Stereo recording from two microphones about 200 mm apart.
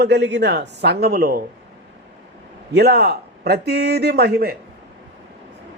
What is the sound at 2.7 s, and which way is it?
Speech, 55° right (ahead or behind).